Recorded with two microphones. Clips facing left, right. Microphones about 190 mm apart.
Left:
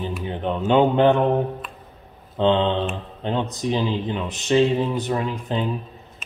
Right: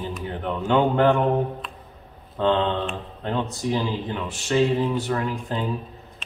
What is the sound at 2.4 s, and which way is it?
Speech, 20° left (ahead or behind).